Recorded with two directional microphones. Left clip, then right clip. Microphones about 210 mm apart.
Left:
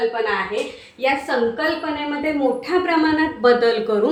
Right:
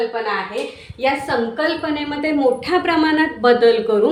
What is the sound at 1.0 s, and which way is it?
Speech, 60° right (ahead or behind).